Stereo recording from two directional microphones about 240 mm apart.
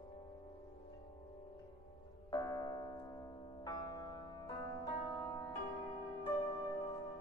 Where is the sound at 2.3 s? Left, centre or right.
Centre.